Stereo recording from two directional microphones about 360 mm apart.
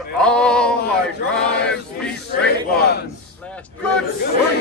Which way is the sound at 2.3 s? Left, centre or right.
Left.